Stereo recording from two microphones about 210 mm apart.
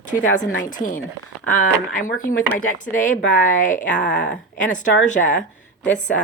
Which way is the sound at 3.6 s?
40° left (ahead or behind).